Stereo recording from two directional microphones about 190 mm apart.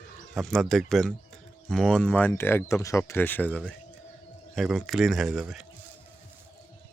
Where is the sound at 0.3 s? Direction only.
Centre (ahead or behind).